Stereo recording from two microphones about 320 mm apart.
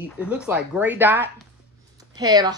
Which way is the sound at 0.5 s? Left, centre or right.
Centre.